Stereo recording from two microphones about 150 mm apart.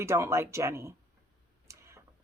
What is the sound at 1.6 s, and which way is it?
Tick-tock, 20° right (ahead or behind).